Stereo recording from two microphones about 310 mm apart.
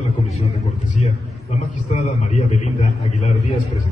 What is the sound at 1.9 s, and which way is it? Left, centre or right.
A man's voice, left.